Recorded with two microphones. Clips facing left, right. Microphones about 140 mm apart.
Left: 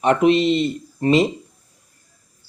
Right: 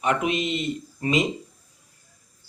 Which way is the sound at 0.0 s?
35° left (ahead or behind).